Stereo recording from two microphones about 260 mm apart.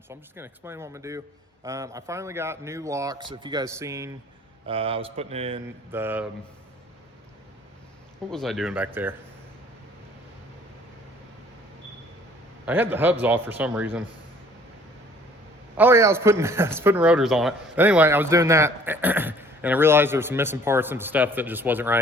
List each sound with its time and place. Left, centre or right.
0.1 s a man's voice: centre
4.6 s speech: right
5.9 s a man's voice: centre
8.3 s speech: centre
12.6 s a man's voice: centre
15.8 s a man's voice: centre